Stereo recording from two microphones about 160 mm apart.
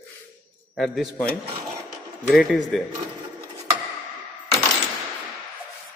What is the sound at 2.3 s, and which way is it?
Speech, centre (ahead or behind).